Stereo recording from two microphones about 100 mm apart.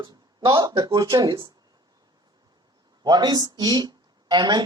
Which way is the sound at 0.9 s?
40° right (ahead or behind).